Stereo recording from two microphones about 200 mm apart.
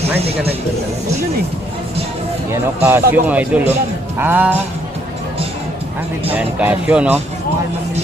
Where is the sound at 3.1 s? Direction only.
10° right (ahead or behind).